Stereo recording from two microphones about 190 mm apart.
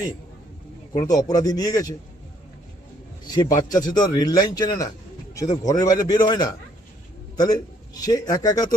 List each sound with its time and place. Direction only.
0.9 s a man's voice: 20° left (ahead or behind)
3.2 s a man's voice: 20° left (ahead or behind)